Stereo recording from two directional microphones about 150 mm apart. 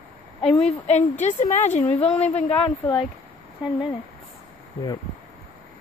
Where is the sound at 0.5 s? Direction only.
45° left (ahead or behind).